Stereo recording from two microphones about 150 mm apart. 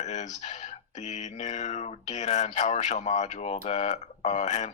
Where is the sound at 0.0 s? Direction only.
50° left (ahead or behind).